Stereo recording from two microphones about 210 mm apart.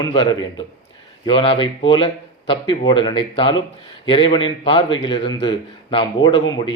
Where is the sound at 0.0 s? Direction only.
20° left (ahead or behind).